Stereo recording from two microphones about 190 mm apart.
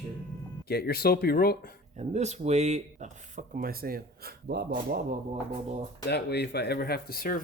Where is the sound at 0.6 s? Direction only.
55° left (ahead or behind).